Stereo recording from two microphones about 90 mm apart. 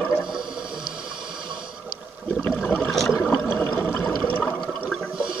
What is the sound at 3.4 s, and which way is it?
Water, 25° left (ahead or behind).